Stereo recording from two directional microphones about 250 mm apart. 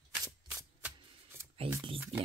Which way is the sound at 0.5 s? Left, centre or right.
Centre.